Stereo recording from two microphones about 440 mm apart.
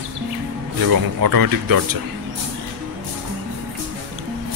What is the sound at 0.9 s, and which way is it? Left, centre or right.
Speech, right.